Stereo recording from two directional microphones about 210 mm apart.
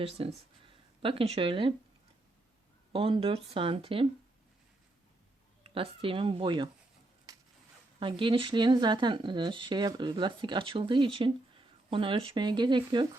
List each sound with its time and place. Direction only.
0.0 s speech: 30° right (ahead or behind)
2.9 s speech: 25° right (ahead or behind)
5.6 s speech: 25° right (ahead or behind)
7.9 s speech: 25° right (ahead or behind)